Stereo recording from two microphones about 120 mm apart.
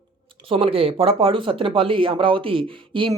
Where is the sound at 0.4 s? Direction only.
50° right (ahead or behind).